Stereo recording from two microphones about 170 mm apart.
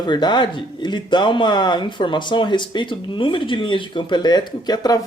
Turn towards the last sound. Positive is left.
turn(degrees=25)  # may be behind; listen again after turning